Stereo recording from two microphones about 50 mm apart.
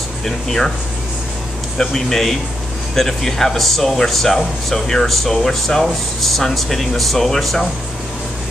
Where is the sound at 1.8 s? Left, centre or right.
Centre.